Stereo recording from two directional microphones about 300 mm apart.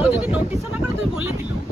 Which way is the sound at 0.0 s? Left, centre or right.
Centre.